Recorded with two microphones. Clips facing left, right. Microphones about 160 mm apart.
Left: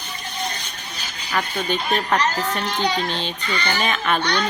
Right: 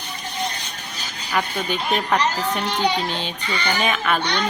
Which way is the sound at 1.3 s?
5° right (ahead or behind).